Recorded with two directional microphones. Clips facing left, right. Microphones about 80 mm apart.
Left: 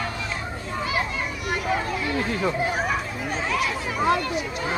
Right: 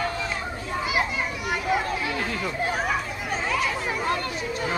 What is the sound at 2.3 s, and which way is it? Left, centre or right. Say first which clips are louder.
Chatter: left 5 dB; left.